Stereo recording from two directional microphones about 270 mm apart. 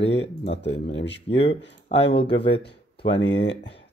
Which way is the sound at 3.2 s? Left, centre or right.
Left.